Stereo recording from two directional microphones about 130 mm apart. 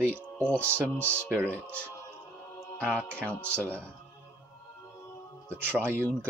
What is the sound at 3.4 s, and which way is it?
Speech, 20° right (ahead or behind).